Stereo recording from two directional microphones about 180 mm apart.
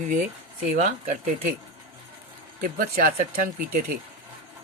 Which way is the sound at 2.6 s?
55° right (ahead or behind).